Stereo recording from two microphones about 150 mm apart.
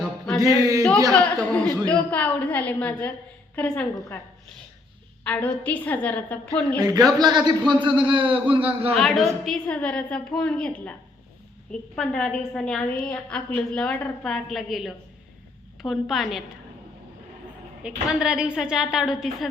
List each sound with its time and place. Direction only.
0.0 s a sound: centre (ahead or behind)
0.6 s speech: 20° right (ahead or behind)
1.1 s a woman's voice: 5° left (ahead or behind)
5.2 s a woman's voice: 10° left (ahead or behind)
6.7 s a man's voice: 25° right (ahead or behind)
9.0 s a woman's voice: centre (ahead or behind)
17.8 s a woman's voice: 5° right (ahead or behind)